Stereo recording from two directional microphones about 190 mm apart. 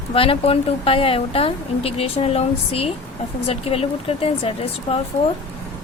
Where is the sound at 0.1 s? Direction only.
30° left (ahead or behind).